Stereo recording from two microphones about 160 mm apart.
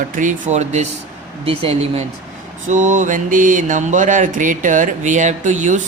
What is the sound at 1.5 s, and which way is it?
Speech, 40° right (ahead or behind).